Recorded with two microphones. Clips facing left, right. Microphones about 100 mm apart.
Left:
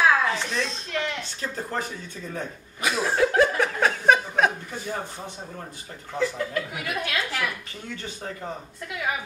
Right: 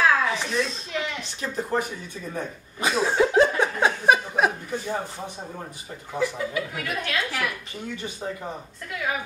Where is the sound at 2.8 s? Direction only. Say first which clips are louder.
Right 1 dB; 25° right (ahead or behind).